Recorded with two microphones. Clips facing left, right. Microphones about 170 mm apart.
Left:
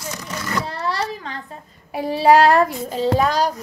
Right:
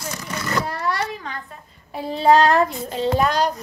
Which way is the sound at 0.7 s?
30° left (ahead or behind).